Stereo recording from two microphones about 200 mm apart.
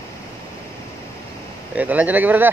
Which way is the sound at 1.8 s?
10° right (ahead or behind).